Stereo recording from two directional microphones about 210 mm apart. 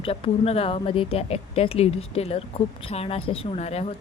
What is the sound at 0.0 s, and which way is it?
A woman's voice, 30° left (ahead or behind).